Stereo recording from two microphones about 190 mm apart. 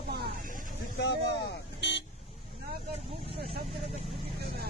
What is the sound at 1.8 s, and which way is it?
Vehicle, 65° left (ahead or behind).